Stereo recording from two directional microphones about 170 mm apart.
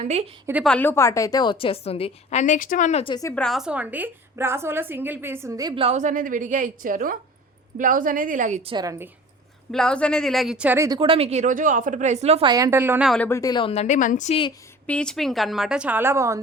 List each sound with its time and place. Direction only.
0.0 s a woman's voice: 40° right (ahead or behind)
0.6 s a woman's voice: 10° left (ahead or behind); by 3.0 s 50° left (ahead or behind)
3.0 s a woman's voice: 30° left (ahead or behind)
3.3 s a woman's voice: centre (ahead or behind); by 5.8 s 20° right (ahead or behind)
5.8 s a woman's voice: 45° right (ahead or behind)
8.6 s a woman's voice: 25° right (ahead or behind)
9.7 s a woman's voice: 5° left (ahead or behind)
10.8 s a woman's voice: 25° right (ahead or behind)
12.5 s a woman's voice: 20° right (ahead or behind)
13.1 s a woman's voice: 10° left (ahead or behind); by 14.3 s 50° left (ahead or behind)
14.8 s a woman's voice: 5° left (ahead or behind); by 16.4 s 15° right (ahead or behind)